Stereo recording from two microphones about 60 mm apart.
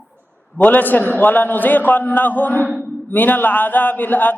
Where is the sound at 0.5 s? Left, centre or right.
Left.